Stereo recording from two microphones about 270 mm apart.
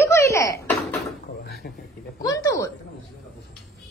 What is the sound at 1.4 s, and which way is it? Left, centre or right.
Speech, left.